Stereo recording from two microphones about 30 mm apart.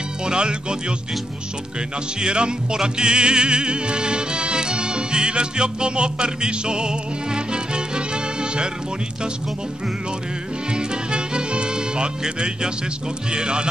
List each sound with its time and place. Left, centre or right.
0.2 s speech: right
2.1 s music: right
10.7 s music: right
12.2 s speech: right